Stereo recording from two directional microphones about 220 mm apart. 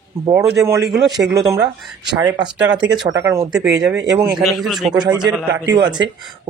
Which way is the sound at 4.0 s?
5° right (ahead or behind).